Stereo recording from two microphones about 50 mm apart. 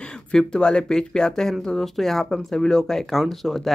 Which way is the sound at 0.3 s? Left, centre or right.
Centre.